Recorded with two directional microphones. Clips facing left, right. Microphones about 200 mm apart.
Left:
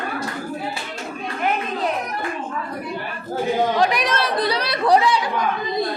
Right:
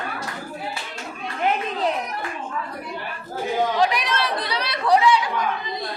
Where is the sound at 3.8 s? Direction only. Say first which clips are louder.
Left 2 dB; 45° left (ahead or behind).